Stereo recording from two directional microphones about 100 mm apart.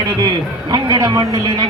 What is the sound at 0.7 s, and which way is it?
Speech, 40° right (ahead or behind).